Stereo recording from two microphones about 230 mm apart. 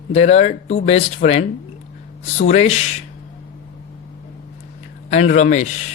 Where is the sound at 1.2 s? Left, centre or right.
Left.